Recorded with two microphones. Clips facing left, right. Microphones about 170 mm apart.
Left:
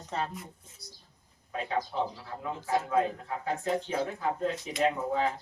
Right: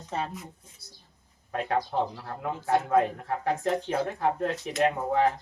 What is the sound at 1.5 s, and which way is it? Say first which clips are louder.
A man's voice: right 4 dB; 65° right (ahead or behind).